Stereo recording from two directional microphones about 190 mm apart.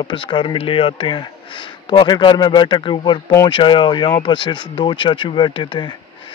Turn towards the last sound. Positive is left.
turn(degrees=25)  # may be behind; listen again after turning